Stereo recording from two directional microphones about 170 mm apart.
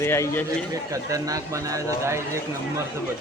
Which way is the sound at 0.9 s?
20° right (ahead or behind).